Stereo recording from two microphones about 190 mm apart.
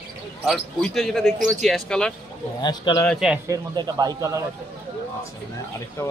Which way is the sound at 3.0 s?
5° left (ahead or behind).